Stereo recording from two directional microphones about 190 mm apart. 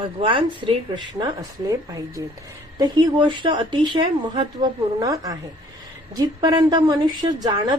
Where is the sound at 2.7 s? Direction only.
20° right (ahead or behind).